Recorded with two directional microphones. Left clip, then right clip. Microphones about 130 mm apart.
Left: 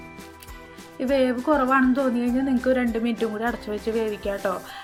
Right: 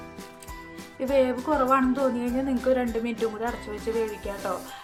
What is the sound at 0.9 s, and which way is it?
A woman's voice, 25° left (ahead or behind).